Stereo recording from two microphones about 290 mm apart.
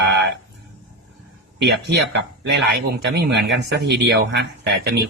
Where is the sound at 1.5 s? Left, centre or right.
Right.